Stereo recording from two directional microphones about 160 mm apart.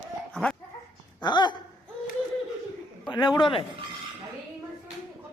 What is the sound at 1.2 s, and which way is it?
Speech, 25° left (ahead or behind).